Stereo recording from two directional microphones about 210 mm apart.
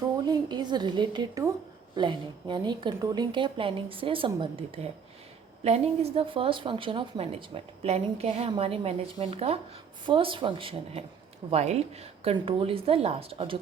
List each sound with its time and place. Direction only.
0.3 s a woman's voice: 20° right (ahead or behind)